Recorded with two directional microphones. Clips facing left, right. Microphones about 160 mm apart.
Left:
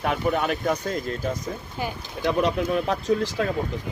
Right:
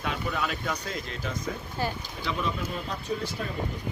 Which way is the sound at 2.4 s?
65° left (ahead or behind).